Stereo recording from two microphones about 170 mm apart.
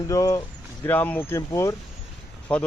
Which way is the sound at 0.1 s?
20° left (ahead or behind).